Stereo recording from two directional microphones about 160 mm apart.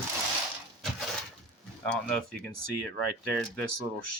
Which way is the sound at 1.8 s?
5° left (ahead or behind).